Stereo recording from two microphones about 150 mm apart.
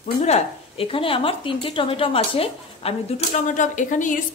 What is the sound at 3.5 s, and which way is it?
Speech, 55° left (ahead or behind).